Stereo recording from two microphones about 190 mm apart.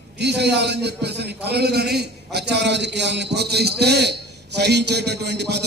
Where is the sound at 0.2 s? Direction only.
60° right (ahead or behind).